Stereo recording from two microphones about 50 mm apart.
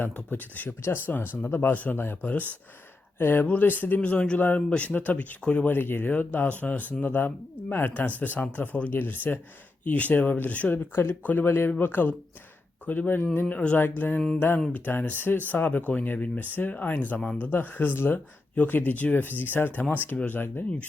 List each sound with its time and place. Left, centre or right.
0.0 s speech: left
4.4 s speech: left
5.7 s speech: left
10.7 s speech: left
11.4 s speech: left
11.8 s speech: left